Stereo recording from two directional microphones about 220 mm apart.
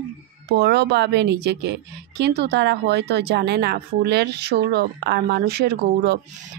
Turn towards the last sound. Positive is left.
turn(degrees=-45)  # may be behind; listen again after turning